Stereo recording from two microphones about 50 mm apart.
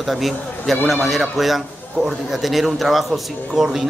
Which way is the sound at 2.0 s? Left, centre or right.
Centre.